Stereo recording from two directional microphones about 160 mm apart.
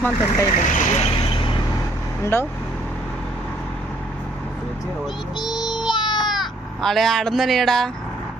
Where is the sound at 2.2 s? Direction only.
15° left (ahead or behind).